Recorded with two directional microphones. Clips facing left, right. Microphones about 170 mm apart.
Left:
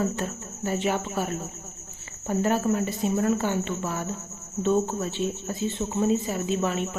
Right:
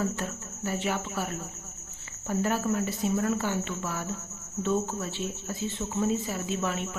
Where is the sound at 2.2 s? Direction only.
25° left (ahead or behind).